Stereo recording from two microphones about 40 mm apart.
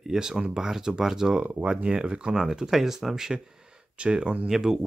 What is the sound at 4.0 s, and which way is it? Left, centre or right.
Speech, right.